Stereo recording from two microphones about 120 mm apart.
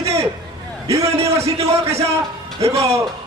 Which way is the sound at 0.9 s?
25° right (ahead or behind).